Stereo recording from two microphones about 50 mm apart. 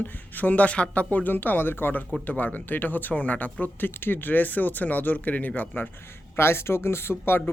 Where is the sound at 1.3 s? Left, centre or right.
Left.